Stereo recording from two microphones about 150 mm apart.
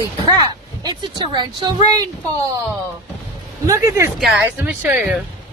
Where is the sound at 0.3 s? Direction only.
30° right (ahead or behind).